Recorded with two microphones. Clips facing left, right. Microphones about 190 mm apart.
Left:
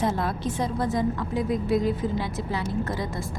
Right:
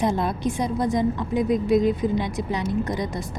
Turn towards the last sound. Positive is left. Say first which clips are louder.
# right 3 dB
turn(degrees=-15)  # may be behind; listen again after turning